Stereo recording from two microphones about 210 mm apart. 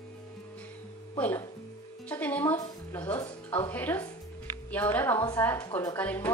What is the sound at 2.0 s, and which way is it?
Music, 5° left (ahead or behind).